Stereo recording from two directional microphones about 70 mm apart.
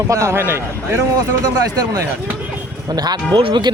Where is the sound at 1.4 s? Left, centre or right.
Right.